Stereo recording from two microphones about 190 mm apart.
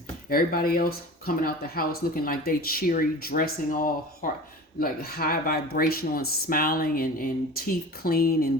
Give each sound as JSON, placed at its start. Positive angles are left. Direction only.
{"t": 0.3, "sound": "speech", "side_deg": 50}